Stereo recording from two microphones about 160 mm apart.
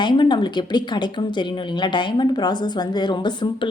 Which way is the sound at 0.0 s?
30° left (ahead or behind).